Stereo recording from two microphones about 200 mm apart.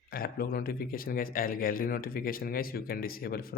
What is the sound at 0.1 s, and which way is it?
Speech, 50° left (ahead or behind).